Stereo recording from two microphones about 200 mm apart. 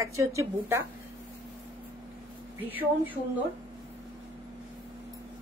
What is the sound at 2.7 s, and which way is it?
Speech, 10° right (ahead or behind).